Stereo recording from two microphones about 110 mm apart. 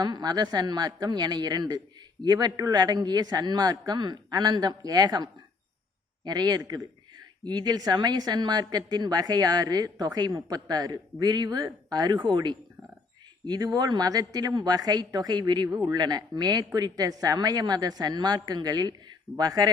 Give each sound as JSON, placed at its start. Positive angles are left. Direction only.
{"t": 0.0, "sound": "a woman's voice", "side_deg": -40}